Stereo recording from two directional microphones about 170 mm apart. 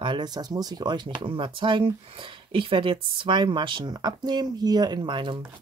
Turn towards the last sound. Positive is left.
turn(degrees=-30)  # may be behind; listen again after turning